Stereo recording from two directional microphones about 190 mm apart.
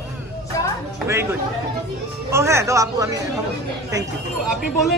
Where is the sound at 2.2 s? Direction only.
15° right (ahead or behind).